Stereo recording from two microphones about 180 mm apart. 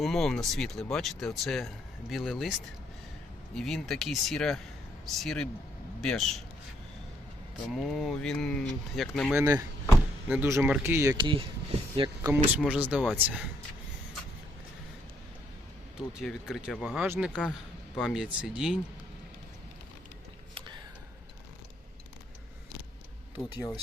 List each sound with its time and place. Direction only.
0.0 s speech: centre (ahead or behind)
3.5 s speech: centre (ahead or behind)
7.8 s speech: centre (ahead or behind)
9.3 s speech: 15° right (ahead or behind)
12.2 s speech: 10° right (ahead or behind)
16.2 s speech: 5° right (ahead or behind)